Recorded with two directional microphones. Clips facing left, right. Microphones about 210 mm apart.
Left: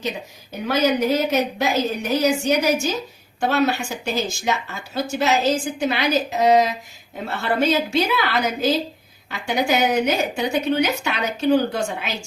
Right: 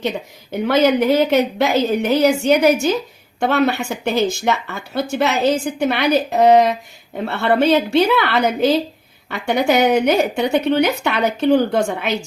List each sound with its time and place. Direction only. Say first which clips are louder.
1.1 s speech: right 5 dB; 60° right (ahead or behind)